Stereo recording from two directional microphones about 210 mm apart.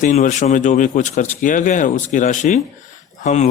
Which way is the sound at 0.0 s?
35° left (ahead or behind).